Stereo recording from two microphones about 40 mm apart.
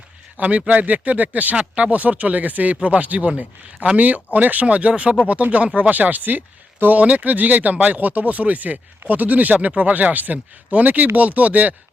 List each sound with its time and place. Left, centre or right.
0.3 s a man's voice: right
5.9 s speech: right